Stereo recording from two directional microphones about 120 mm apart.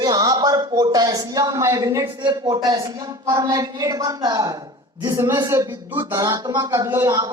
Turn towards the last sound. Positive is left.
turn(degrees=-30)  # may be behind; listen again after turning